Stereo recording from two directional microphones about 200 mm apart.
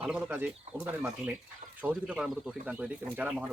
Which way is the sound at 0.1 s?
10° right (ahead or behind).